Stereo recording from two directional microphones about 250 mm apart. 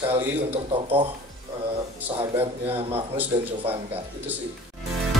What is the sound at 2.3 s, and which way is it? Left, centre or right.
Speech, centre.